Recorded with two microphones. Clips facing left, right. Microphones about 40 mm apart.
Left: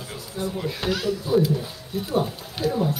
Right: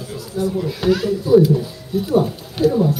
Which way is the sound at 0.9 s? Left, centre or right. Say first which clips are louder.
Right 8 dB; right.